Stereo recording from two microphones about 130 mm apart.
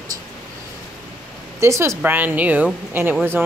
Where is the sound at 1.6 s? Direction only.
20° right (ahead or behind).